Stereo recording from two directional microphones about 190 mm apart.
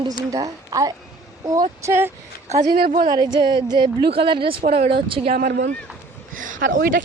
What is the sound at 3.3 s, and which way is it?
Speech, 25° right (ahead or behind).